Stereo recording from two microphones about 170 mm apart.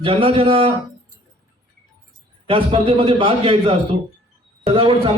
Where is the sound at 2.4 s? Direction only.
30° right (ahead or behind).